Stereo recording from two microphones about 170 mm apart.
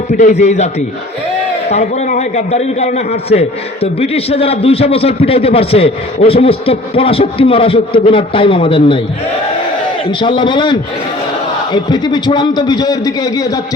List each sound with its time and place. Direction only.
0.1 s a man's voice: 45° left (ahead or behind)
1.7 s a man's voice: 45° left (ahead or behind)
10.1 s a man's voice: 30° left (ahead or behind)